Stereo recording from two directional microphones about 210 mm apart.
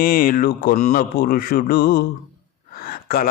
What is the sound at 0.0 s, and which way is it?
A man's voice, 45° left (ahead or behind).